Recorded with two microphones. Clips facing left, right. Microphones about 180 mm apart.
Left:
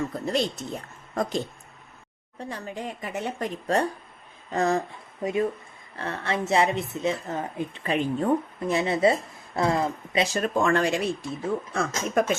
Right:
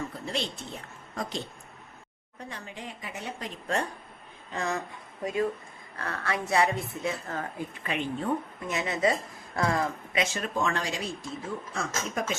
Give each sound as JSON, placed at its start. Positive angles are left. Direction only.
{"t": 0.3, "sound": "a woman's voice", "side_deg": 45}
{"t": 2.4, "sound": "a woman's voice", "side_deg": 40}
{"t": 5.2, "sound": "a woman's voice", "side_deg": 25}
{"t": 7.9, "sound": "a woman's voice", "side_deg": 35}
{"t": 10.4, "sound": "speech", "side_deg": 50}